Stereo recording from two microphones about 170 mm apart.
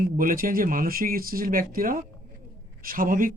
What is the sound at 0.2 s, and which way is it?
Speech, 55° right (ahead or behind).